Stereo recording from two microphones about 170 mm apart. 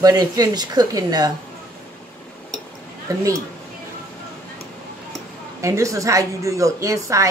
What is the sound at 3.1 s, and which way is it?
Speech, 20° right (ahead or behind).